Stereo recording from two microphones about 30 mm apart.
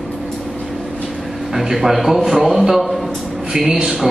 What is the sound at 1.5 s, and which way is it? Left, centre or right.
A man's voice, centre.